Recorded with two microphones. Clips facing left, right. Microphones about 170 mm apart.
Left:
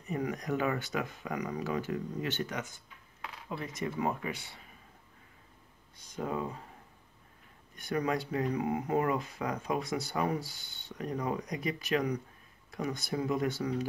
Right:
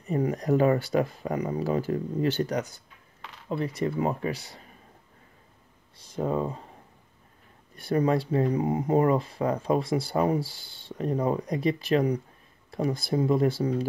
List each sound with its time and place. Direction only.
0.0 s speech: 35° right (ahead or behind)
5.9 s speech: 30° right (ahead or behind)
7.7 s speech: 30° right (ahead or behind)